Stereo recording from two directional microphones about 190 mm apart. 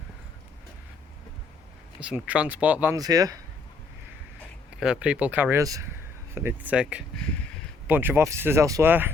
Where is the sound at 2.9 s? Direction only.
20° right (ahead or behind).